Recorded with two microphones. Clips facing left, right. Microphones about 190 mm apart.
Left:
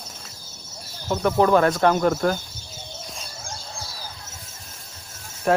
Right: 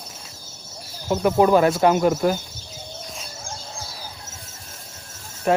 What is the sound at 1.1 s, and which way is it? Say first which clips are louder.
Speech: right 2 dB; 15° right (ahead or behind).